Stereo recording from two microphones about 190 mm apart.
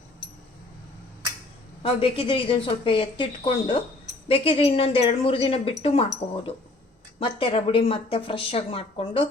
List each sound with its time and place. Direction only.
1.8 s speech: 30° left (ahead or behind)
7.2 s speech: 30° left (ahead or behind)